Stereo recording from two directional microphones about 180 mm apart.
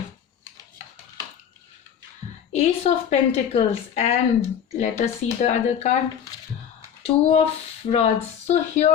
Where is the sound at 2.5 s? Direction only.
40° left (ahead or behind).